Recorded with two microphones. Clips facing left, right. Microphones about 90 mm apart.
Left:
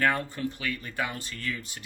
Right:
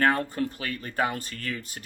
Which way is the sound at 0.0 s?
40° right (ahead or behind).